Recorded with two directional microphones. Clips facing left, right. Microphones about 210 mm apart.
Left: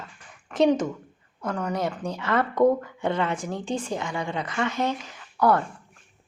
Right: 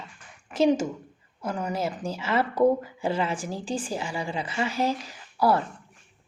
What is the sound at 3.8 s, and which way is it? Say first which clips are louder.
A woman's voice: left 1 dB; 30° right (ahead or behind).